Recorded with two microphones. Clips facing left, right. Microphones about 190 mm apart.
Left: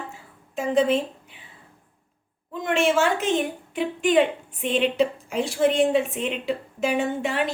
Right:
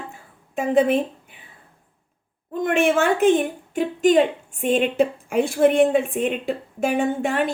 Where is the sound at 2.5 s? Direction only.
50° right (ahead or behind).